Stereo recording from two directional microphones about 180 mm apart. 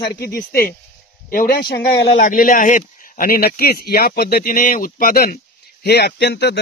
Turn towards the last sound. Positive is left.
turn(degrees=70)  # may be behind; listen again after turning